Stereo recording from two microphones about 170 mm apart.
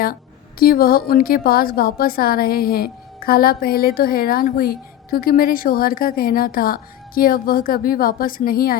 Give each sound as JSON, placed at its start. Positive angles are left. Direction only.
{"t": 0.6, "sound": "a woman's voice", "side_deg": 60}